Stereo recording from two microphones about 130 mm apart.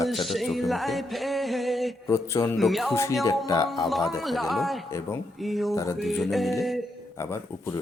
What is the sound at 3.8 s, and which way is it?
Music, centre (ahead or behind).